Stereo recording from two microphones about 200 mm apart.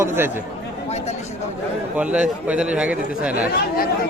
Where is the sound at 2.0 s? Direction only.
5° right (ahead or behind).